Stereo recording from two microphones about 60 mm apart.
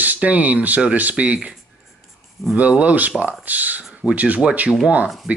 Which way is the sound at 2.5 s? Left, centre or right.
Right.